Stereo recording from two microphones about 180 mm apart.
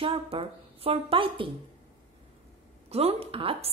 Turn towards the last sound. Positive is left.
turn(degrees=-30)  # may be behind; listen again after turning